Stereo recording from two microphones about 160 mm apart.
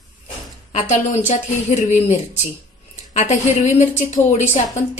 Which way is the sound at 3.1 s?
45° left (ahead or behind).